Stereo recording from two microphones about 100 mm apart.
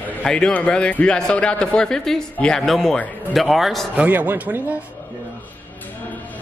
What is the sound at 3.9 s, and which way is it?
Speech, 15° right (ahead or behind).